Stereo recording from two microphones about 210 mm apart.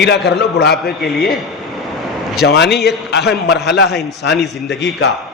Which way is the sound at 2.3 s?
50° left (ahead or behind).